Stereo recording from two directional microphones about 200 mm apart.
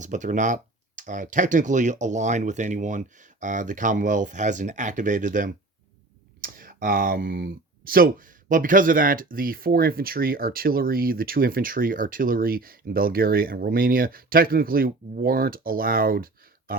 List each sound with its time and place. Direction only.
0.0 s speech: 40° right (ahead or behind)